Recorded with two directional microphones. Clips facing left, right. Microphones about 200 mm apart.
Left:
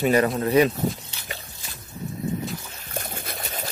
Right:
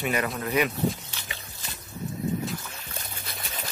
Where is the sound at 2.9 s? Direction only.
50° left (ahead or behind).